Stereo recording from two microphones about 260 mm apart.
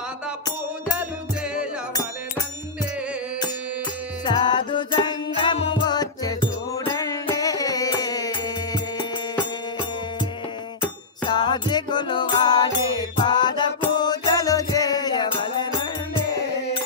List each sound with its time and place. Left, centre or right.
4.4 s music: centre
10.8 s music: centre